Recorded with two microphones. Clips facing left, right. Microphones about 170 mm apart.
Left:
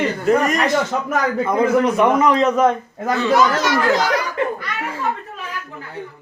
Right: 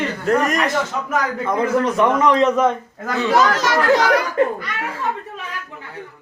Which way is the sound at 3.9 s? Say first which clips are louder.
Right 3 dB; 65° right (ahead or behind).